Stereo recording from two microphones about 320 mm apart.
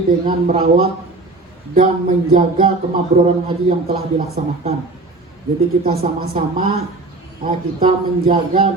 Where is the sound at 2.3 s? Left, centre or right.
Right.